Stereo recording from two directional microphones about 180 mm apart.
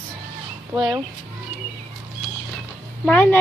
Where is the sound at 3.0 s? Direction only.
10° left (ahead or behind).